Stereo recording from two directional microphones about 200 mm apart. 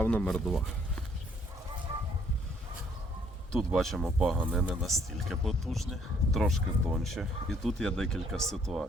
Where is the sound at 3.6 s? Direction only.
Centre (ahead or behind).